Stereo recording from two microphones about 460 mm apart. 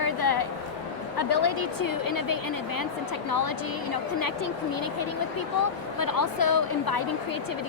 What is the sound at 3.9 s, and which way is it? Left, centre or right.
A woman's voice, left.